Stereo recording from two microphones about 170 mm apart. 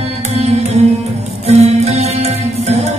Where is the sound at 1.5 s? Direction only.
40° right (ahead or behind).